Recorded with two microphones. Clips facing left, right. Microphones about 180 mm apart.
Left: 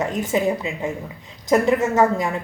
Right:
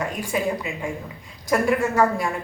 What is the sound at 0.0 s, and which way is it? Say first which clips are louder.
A woman's voice: left 4 dB; 20° left (ahead or behind).